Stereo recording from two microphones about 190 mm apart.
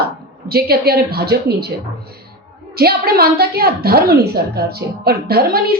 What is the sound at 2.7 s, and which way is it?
A woman's voice, 55° right (ahead or behind).